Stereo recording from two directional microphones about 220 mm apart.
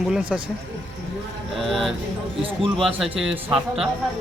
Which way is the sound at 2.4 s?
25° right (ahead or behind).